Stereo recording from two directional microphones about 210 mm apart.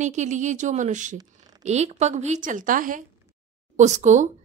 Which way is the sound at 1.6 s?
30° right (ahead or behind).